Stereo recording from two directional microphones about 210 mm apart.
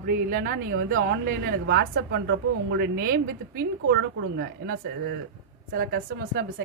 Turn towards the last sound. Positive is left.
turn(degrees=-45)  # may be behind; listen again after turning